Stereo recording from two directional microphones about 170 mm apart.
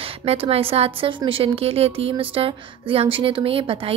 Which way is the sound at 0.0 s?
35° right (ahead or behind).